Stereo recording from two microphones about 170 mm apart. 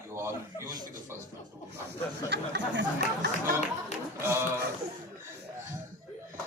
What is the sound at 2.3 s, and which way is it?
Speech, 90° right.